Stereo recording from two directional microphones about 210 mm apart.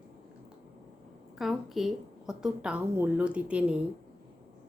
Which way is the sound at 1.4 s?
Centre (ahead or behind).